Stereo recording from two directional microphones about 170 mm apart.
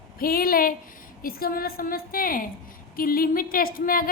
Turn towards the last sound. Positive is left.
turn(degrees=55)  # may be behind; listen again after turning